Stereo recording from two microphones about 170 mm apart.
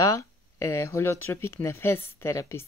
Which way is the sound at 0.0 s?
15° left (ahead or behind).